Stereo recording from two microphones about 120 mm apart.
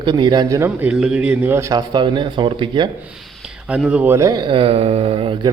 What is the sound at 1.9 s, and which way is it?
Speech, 40° right (ahead or behind).